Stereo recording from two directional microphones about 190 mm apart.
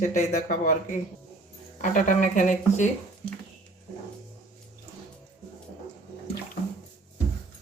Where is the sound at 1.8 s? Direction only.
45° left (ahead or behind).